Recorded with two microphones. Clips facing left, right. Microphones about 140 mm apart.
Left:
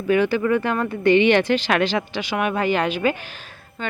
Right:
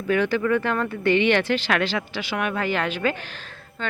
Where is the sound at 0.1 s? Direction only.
15° left (ahead or behind).